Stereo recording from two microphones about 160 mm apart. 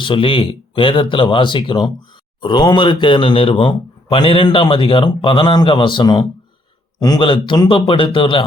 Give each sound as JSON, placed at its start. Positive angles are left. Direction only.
{"t": 0.0, "sound": "speech", "side_deg": 35}